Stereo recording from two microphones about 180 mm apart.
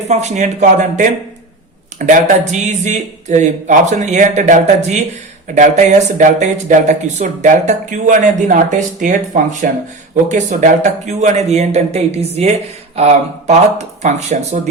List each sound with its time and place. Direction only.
0.1 s a man's voice: 40° right (ahead or behind)